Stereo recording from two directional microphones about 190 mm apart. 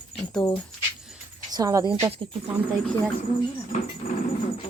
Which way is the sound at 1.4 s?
20° right (ahead or behind).